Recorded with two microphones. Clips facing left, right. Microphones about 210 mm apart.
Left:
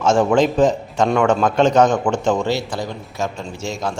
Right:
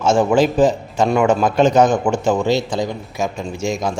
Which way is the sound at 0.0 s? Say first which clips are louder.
Right 1 dB; 5° right (ahead or behind).